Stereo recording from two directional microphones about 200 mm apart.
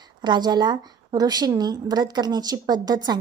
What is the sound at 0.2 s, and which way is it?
A woman's voice, 20° right (ahead or behind).